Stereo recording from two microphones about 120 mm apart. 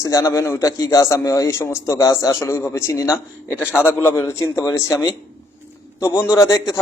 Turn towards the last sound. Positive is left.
turn(degrees=25)  # may be behind; listen again after turning